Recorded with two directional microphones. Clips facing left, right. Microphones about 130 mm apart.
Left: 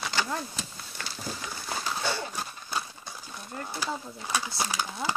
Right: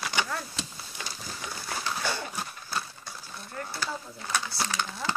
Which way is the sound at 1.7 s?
10° left (ahead or behind).